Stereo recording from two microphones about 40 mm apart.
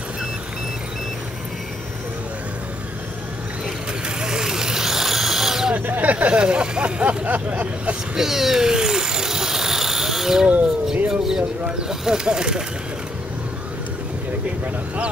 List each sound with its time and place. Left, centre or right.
4.2 s vehicle: centre
5.8 s vehicle: right
6.4 s speech: right
8.2 s cat: centre
11.1 s a sound: centre
11.9 s speech: centre